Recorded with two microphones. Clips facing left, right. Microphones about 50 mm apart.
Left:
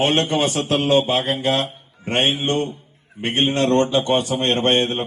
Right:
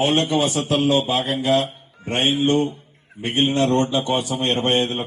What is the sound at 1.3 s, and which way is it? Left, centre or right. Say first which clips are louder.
Mantra: right 2 dB; left.